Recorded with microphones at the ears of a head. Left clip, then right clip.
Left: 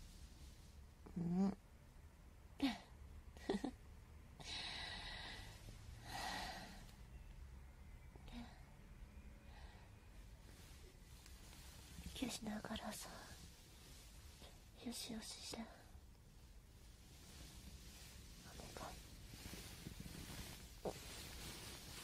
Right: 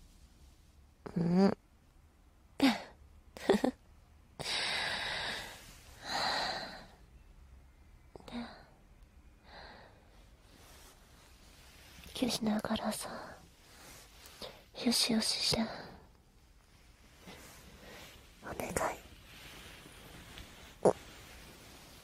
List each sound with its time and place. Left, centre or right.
1.0 s a sound: right
4.4 s gasp: right
8.1 s whispering: right
9.5 s gasp: right
10.5 s a sound: right
11.8 s whispering: right
17.2 s whispering: right